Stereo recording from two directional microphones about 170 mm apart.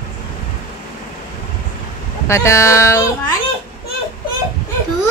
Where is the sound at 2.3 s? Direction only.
15° left (ahead or behind).